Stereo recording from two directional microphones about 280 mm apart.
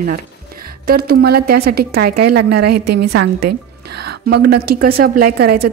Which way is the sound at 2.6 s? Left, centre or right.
Right.